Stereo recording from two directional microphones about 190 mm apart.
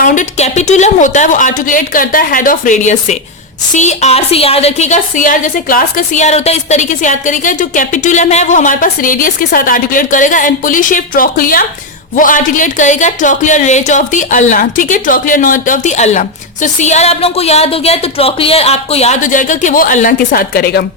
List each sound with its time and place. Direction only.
0.0 s a woman's voice: 45° left (ahead or behind)